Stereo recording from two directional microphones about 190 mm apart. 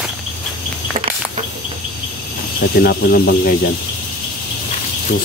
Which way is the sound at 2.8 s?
55° left (ahead or behind).